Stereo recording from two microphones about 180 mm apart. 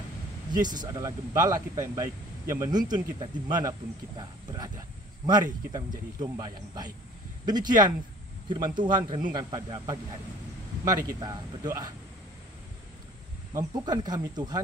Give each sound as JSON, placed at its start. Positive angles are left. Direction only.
{"t": 0.5, "sound": "speech", "side_deg": -25}
{"t": 13.5, "sound": "speech", "side_deg": -20}